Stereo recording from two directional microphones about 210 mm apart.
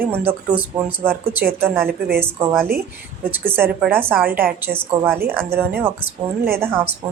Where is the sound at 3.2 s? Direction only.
10° right (ahead or behind).